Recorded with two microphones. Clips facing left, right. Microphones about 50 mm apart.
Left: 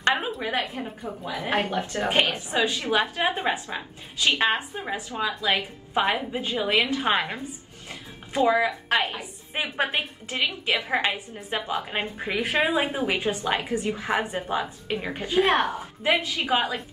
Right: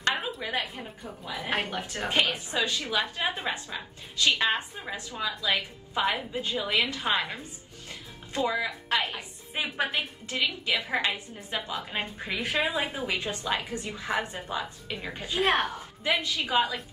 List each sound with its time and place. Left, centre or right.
0.4 s a woman's voice: left
5.1 s a woman's voice: left
7.9 s music: left
8.8 s a woman's voice: left
11.0 s a woman's voice: left